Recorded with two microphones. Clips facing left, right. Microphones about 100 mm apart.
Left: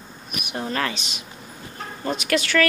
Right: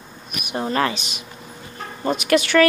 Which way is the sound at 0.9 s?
5° right (ahead or behind).